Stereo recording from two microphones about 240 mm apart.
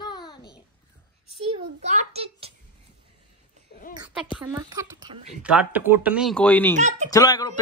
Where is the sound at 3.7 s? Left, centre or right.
Left.